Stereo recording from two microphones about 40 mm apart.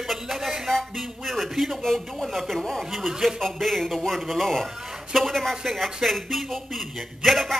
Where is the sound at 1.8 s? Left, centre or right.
Centre.